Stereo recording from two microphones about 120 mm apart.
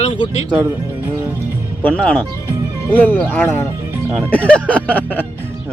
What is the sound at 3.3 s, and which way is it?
Speech, 20° left (ahead or behind).